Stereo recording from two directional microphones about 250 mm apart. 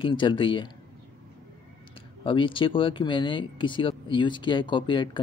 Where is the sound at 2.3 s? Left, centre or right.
Centre.